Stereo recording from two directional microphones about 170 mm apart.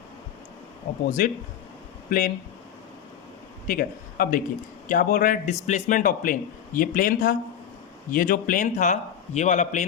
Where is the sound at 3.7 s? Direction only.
55° left (ahead or behind).